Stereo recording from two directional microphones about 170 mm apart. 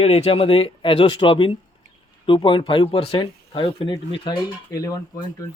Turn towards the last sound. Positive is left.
turn(degrees=20)  # may be behind; listen again after turning